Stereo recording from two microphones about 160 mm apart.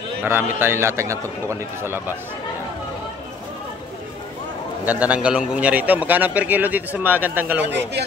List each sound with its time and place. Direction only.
0.2 s a man's voice: 15° right (ahead or behind)
4.8 s a man's voice: 10° right (ahead or behind)
7.6 s a man's voice: 90° right